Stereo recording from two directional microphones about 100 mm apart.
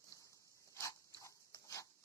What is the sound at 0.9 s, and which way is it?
Dog, 35° left (ahead or behind).